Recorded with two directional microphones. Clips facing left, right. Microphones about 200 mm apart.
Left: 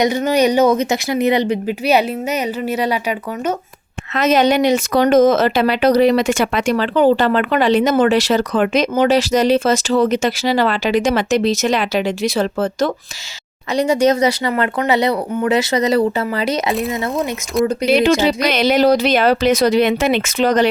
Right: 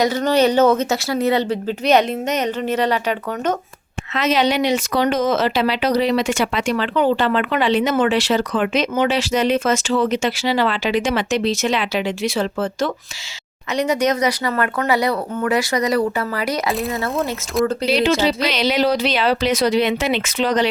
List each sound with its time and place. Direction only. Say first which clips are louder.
0.0 s speech: left 1 dB; 15° left (ahead or behind)
4.1 s speech: left 4 dB; 45° left (ahead or behind)
13.7 s speech: left 4 dB; 30° left (ahead or behind)
17.2 s speech: left 2 dB; centre (ahead or behind)
17.8 s speech: left 6 dB; 50° left (ahead or behind)